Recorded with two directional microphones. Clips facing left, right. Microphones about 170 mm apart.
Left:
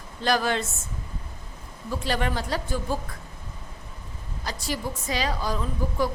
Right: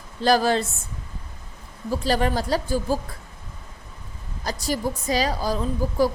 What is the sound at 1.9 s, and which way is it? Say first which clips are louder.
A woman's voice: right 5 dB; 35° right (ahead or behind).